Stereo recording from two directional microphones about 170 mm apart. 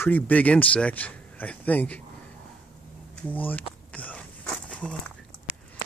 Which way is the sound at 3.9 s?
10° left (ahead or behind).